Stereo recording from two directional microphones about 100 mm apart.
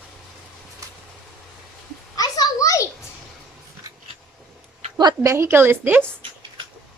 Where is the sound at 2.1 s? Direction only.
40° left (ahead or behind).